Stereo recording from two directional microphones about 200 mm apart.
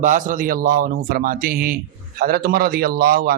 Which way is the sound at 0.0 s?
40° right (ahead or behind).